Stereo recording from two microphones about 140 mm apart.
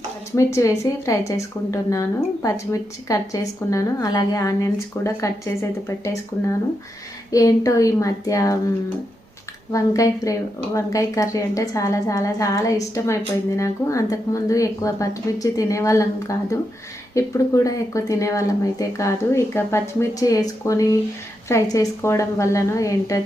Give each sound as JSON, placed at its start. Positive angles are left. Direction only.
{"t": 0.3, "sound": "speech", "side_deg": 20}
{"t": 7.3, "sound": "speech", "side_deg": 25}
{"t": 9.7, "sound": "speech", "side_deg": 25}